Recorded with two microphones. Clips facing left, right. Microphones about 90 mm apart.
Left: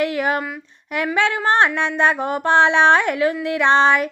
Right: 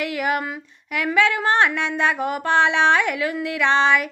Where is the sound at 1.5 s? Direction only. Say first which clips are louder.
Left 2 dB; 30° left (ahead or behind).